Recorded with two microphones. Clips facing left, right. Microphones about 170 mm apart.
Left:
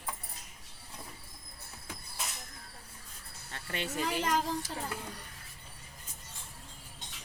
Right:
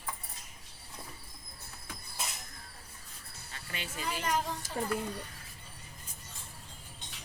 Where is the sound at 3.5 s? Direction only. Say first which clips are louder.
Left 6 dB; 60° left (ahead or behind); by 4.4 s 80° left.